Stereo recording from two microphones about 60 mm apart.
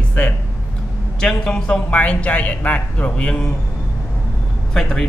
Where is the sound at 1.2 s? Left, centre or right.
Centre.